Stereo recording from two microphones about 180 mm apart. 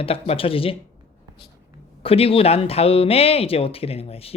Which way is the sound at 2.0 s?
30° left (ahead or behind).